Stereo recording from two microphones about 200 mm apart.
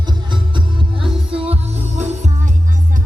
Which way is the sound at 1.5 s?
35° right (ahead or behind).